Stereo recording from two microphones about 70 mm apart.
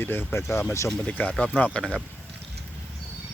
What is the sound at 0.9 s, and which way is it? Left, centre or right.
Speech, centre.